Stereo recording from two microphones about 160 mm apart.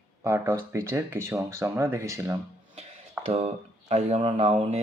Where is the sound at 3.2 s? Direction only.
40° right (ahead or behind).